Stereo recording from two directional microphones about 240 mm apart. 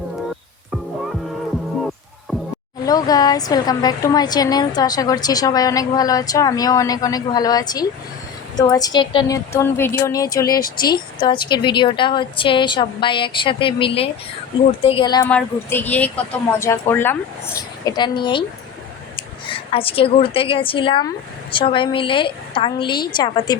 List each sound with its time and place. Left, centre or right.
2.8 s a woman's voice: centre
15.3 s a woman's voice: centre